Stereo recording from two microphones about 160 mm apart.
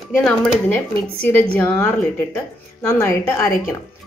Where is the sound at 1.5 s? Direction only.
15° left (ahead or behind).